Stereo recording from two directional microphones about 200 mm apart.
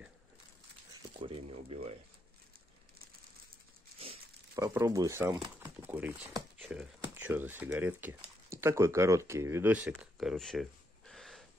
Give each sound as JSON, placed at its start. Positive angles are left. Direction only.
{"t": 1.2, "sound": "speech", "side_deg": -30}
{"t": 4.6, "sound": "speech", "side_deg": -15}